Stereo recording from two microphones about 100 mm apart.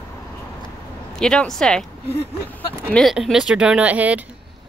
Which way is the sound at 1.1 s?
5° left (ahead or behind).